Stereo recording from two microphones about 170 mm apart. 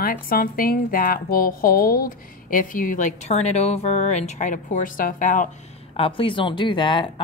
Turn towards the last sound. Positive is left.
turn(degrees=30)  # may be behind; listen again after turning